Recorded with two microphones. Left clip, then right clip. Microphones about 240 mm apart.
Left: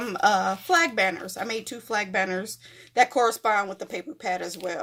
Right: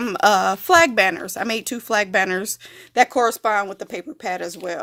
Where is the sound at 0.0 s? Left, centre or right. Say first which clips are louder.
Right 5 dB; right.